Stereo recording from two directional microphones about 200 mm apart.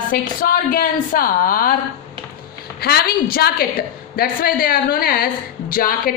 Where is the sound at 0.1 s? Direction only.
45° left (ahead or behind).